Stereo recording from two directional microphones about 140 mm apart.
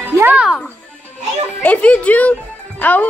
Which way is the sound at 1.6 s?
10° left (ahead or behind).